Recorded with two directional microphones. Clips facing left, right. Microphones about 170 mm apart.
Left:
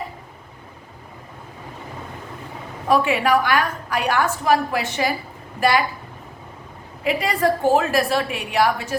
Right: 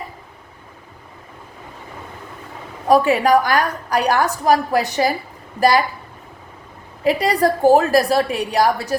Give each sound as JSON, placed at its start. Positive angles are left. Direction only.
{"t": 2.8, "sound": "a woman's voice", "side_deg": -40}
{"t": 7.0, "sound": "a woman's voice", "side_deg": -35}